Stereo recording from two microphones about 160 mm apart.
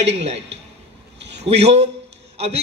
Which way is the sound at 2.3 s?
40° right (ahead or behind).